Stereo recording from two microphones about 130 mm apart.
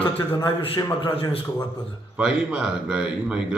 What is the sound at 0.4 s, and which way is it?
Speech, 30° left (ahead or behind).